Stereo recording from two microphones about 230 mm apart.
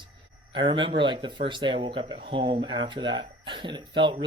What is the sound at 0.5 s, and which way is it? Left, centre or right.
Speech, right.